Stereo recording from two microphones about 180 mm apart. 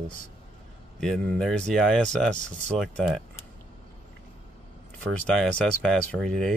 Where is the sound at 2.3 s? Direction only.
50° left (ahead or behind).